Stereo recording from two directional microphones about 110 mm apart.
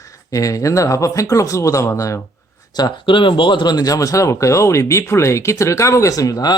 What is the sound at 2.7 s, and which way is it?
Speech, 45° left (ahead or behind).